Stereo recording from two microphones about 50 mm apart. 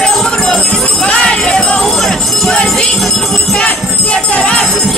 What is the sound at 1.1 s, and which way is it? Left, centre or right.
Jingle bell, centre.